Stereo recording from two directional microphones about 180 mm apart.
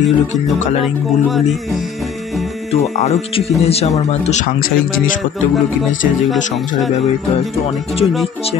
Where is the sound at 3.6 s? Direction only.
35° left (ahead or behind).